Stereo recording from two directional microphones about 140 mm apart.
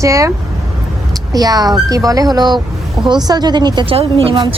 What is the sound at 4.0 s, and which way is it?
Speech, 40° right (ahead or behind).